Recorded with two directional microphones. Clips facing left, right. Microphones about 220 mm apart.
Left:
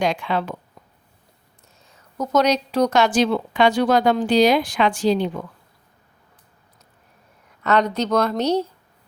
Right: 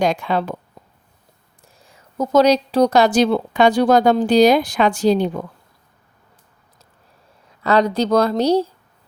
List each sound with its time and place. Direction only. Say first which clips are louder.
0.0 s a woman's voice: right 3 dB; 40° right (ahead or behind)
1.6 s a woman's voice: right 4 dB; 30° right (ahead or behind)
7.6 s a woman's voice: right 3 dB; 35° right (ahead or behind)